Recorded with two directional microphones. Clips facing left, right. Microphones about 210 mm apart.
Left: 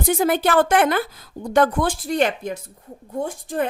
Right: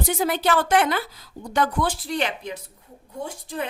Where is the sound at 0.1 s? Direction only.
50° left (ahead or behind).